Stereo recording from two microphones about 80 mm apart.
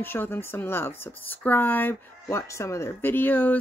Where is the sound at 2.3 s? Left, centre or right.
Left.